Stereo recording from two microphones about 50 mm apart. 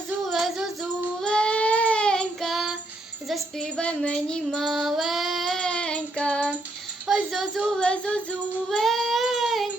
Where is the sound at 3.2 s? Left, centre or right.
Centre.